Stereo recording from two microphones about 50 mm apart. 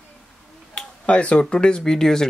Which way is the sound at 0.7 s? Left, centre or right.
Left.